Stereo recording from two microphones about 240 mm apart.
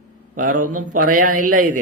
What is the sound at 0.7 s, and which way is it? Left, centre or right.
Speech, right.